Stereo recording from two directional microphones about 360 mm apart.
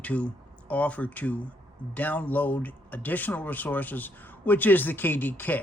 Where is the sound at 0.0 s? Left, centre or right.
Centre.